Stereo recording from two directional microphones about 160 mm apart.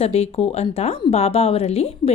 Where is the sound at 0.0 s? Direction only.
40° left (ahead or behind).